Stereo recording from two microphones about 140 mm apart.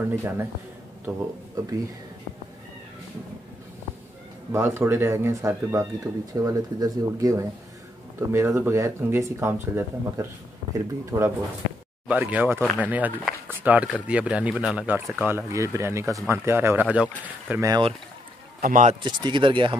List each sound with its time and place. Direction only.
0.0 s speech: 15° right (ahead or behind)
4.5 s speech: 20° right (ahead or behind)
17.6 s speech: 25° right (ahead or behind)
18.6 s speech: 70° right (ahead or behind)
19.0 s speech: 30° right (ahead or behind)